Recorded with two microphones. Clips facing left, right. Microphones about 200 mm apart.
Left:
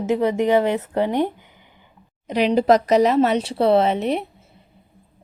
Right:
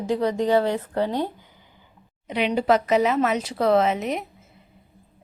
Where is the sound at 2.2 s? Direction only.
40° left (ahead or behind).